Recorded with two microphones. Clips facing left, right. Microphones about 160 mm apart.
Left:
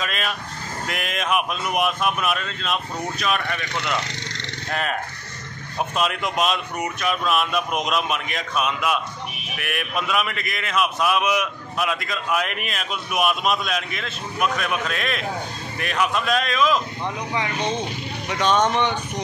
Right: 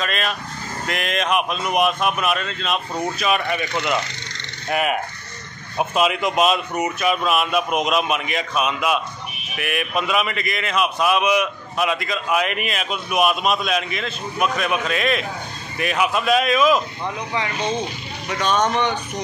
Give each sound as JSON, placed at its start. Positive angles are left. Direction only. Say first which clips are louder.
{"t": 0.0, "sound": "a man's voice", "louder": "right 3 dB", "side_deg": 5}
{"t": 18.4, "sound": "speech", "louder": "even", "side_deg": 25}